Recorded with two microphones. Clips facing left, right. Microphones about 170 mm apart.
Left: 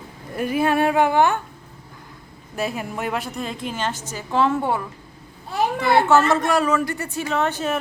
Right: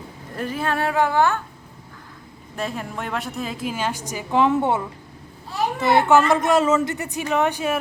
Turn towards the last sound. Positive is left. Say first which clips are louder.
# right 1 dB
turn(degrees=-10)  # may be behind; listen again after turning